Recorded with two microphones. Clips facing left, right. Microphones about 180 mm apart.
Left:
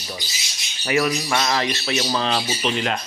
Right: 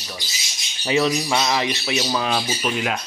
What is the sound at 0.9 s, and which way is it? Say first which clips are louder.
Speech: right 1 dB; 15° right (ahead or behind).